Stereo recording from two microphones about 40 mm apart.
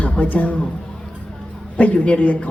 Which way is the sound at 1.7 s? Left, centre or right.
Left.